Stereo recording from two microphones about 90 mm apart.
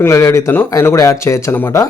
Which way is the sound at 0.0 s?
35° left (ahead or behind).